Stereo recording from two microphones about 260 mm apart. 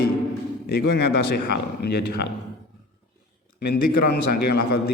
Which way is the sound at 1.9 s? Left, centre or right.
Left.